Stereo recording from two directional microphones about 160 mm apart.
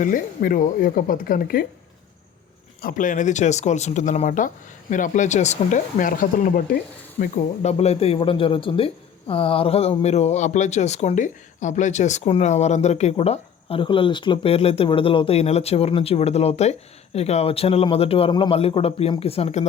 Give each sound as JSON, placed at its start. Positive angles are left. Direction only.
{"t": 0.0, "sound": "speech", "side_deg": 60}
{"t": 2.8, "sound": "speech", "side_deg": 55}
{"t": 7.6, "sound": "a man's voice", "side_deg": 40}